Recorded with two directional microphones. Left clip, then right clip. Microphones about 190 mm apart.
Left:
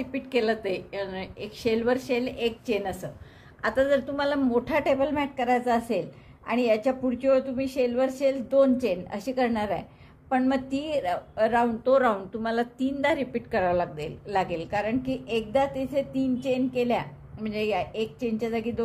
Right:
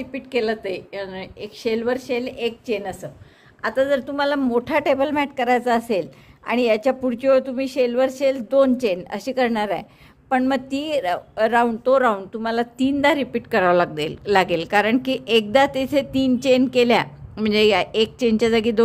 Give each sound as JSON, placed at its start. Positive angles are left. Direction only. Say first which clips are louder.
{"t": 0.0, "sound": "a woman's voice", "louder": "right 3 dB", "side_deg": -15}
{"t": 11.9, "sound": "a woman's voice", "louder": "right 4 dB", "side_deg": -25}